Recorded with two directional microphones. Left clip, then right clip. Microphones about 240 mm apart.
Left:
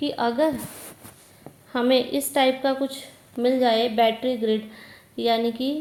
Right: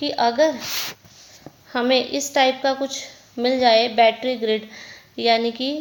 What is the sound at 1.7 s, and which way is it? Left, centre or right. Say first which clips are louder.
A woman's voice: right 2 dB; centre.